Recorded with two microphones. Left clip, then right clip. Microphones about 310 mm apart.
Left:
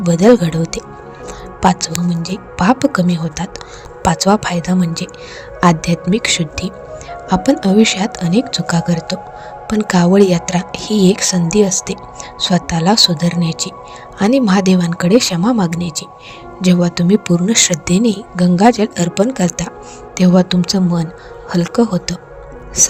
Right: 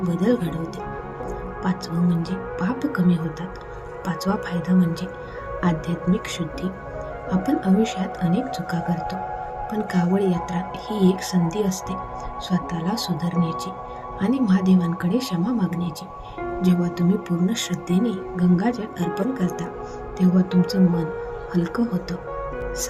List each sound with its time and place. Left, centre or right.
0.1 s speech: left
0.5 s speech: left
2.2 s speech: left